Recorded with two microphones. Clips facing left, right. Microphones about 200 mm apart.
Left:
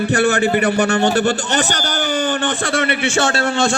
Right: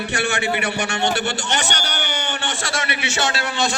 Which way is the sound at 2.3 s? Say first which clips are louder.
Left 8 dB; 60° left (ahead or behind).